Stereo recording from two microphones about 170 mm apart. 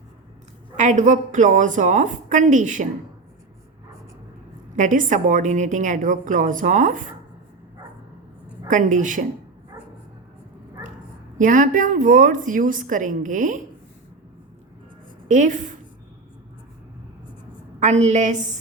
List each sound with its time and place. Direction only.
0.8 s a woman's voice: 45° right (ahead or behind)
4.8 s a woman's voice: 50° right (ahead or behind)
8.6 s a woman's voice: 50° right (ahead or behind)
11.3 s a woman's voice: 50° right (ahead or behind)
15.3 s a woman's voice: 45° right (ahead or behind)
17.7 s a woman's voice: 40° right (ahead or behind)